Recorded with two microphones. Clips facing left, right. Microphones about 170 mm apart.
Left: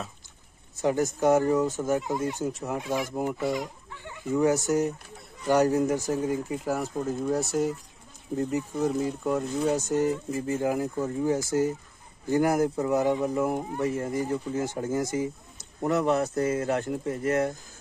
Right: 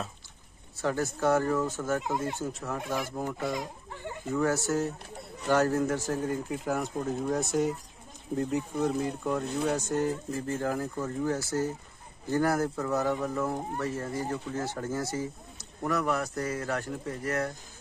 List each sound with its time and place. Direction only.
0.7 s speech: 15° left (ahead or behind)
3.5 s a sound: 45° right (ahead or behind)
4.3 s speech: 15° left (ahead or behind)